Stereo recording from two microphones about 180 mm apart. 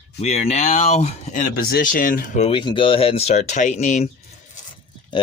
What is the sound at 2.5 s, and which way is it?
Speech, 30° left (ahead or behind).